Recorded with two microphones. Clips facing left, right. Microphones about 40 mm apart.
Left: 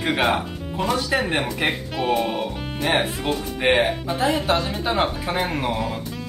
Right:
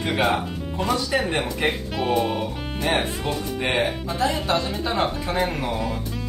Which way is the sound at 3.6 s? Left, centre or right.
Left.